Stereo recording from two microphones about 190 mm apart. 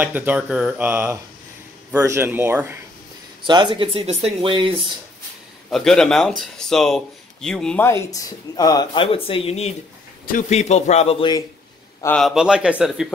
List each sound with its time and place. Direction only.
0.0 s speech: 10° right (ahead or behind)
3.4 s speech: 25° right (ahead or behind)
5.7 s speech: centre (ahead or behind); by 9.7 s 30° left (ahead or behind)
10.2 s a man's voice: 40° left (ahead or behind); by 11.4 s 25° left (ahead or behind)
12.0 s speech: 5° left (ahead or behind)